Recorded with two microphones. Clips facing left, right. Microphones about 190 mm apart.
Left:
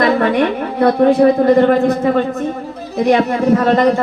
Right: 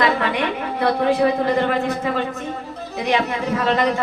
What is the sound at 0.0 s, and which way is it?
A woman's voice, 45° left (ahead or behind).